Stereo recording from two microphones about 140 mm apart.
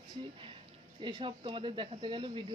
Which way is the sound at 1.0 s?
35° right (ahead or behind).